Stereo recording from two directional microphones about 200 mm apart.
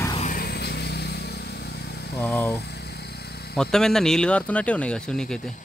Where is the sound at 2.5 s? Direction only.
55° left (ahead or behind).